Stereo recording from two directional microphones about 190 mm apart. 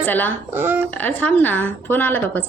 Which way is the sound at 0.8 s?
10° left (ahead or behind).